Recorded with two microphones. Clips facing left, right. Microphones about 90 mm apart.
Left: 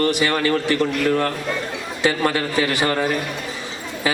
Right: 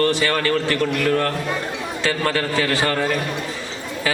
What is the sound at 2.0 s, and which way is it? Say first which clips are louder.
A man's voice: left 2 dB; 20° left (ahead or behind).